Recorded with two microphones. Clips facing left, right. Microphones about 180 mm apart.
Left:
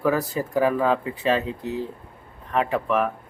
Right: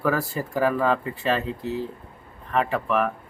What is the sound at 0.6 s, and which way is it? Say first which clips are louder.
Speech: left 1 dB; centre (ahead or behind).